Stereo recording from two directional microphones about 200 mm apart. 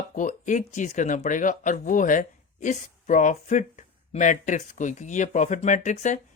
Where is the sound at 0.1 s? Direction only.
40° left (ahead or behind).